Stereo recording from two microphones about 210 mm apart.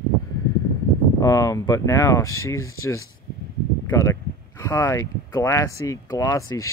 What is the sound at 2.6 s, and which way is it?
Speech, 80° left.